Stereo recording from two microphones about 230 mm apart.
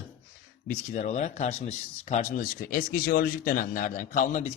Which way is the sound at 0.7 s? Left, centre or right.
Left.